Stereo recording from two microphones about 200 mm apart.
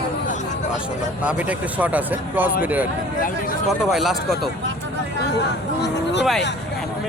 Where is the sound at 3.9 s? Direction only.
Centre (ahead or behind).